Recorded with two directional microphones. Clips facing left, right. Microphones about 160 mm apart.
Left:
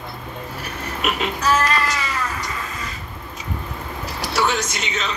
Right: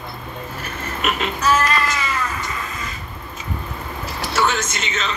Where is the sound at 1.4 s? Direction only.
35° left (ahead or behind).